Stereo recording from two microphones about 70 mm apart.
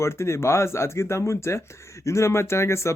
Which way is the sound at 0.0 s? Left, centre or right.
Left.